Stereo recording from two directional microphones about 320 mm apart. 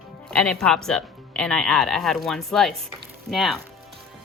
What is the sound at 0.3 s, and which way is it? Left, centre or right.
Speech, centre.